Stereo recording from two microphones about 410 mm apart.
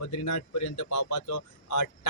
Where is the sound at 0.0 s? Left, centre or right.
Left.